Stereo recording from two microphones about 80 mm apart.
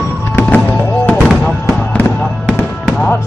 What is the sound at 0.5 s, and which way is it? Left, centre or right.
Music, left.